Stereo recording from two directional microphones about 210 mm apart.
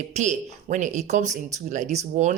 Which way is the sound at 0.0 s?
35° right (ahead or behind).